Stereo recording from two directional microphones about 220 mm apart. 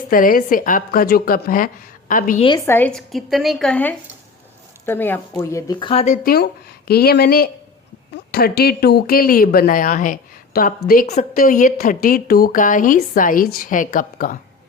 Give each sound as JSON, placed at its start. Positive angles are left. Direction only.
{"t": 0.1, "sound": "speech", "side_deg": 40}
{"t": 2.6, "sound": "a woman's voice", "side_deg": 10}
{"t": 6.2, "sound": "speech", "side_deg": 45}